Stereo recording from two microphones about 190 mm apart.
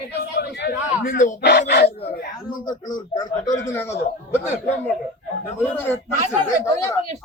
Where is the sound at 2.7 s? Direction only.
20° left (ahead or behind).